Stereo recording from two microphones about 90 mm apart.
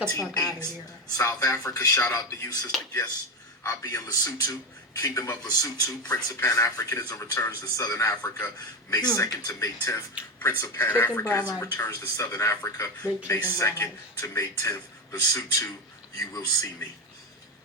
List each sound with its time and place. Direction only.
0.1 s speech: 35° left (ahead or behind)
5.4 s speech: 45° left (ahead or behind)
10.2 s speech: 15° right (ahead or behind)
10.8 s speech: 25° left (ahead or behind)